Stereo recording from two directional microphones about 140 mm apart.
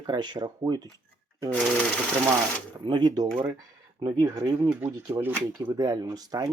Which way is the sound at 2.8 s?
30° right (ahead or behind).